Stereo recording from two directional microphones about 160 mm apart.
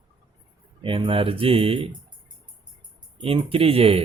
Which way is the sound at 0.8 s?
35° right (ahead or behind).